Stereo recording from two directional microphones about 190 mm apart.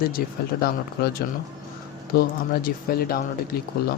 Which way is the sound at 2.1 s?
50° left (ahead or behind).